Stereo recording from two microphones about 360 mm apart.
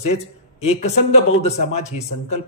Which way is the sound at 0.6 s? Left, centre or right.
Centre.